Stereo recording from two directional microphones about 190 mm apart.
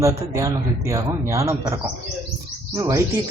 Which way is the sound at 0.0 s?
15° right (ahead or behind).